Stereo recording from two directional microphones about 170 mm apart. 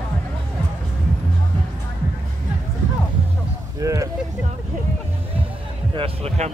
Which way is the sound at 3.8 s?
20° right (ahead or behind).